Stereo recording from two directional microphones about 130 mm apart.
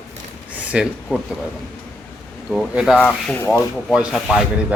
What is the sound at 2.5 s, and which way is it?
Speech, centre (ahead or behind).